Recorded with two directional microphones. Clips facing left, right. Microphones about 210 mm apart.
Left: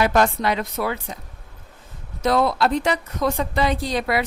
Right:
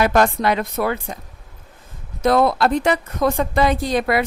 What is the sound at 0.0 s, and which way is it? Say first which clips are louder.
Speech: right 2 dB; 50° right (ahead or behind).